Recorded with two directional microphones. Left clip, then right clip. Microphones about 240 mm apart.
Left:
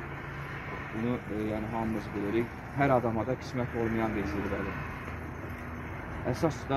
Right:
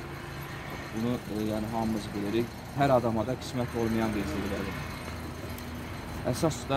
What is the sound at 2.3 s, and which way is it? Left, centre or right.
Speech, centre.